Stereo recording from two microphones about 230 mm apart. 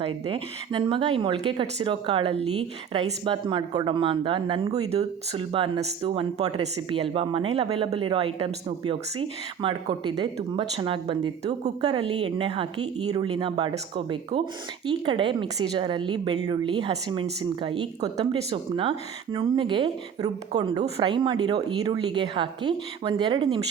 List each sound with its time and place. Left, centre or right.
0.3 s a woman's voice: right